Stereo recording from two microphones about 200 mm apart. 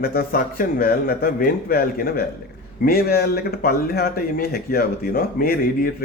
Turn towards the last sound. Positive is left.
turn(degrees=50)  # may be behind; listen again after turning